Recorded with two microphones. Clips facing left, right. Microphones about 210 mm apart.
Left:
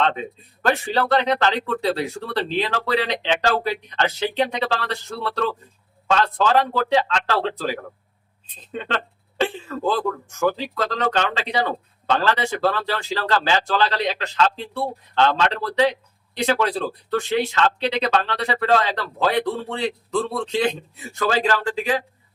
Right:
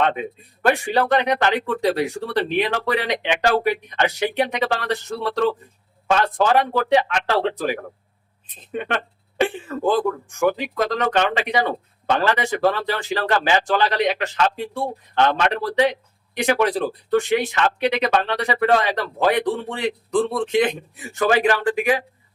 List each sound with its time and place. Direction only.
0.2 s speech: 15° right (ahead or behind)
9.4 s speech: 15° right (ahead or behind)